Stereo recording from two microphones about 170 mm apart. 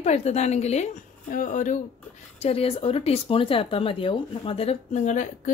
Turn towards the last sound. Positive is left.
turn(degrees=45)  # may be behind; listen again after turning